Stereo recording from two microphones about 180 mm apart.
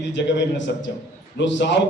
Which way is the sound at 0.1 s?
85° left.